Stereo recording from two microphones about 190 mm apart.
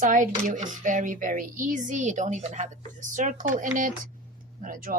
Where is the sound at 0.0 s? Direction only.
45° right (ahead or behind).